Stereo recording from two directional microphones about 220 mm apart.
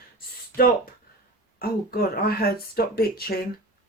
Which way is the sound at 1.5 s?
45° left (ahead or behind).